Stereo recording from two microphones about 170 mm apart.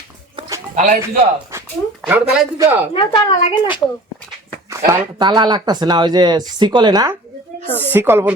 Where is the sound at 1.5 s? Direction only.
15° right (ahead or behind).